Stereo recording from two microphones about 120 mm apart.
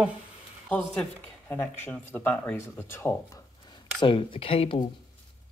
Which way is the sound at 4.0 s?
50° left (ahead or behind).